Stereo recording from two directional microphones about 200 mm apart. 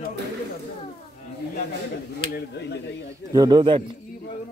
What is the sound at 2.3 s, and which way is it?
Speech, 60° left (ahead or behind).